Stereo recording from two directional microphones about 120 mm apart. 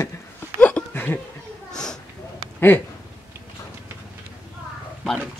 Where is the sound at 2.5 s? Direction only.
15° left (ahead or behind).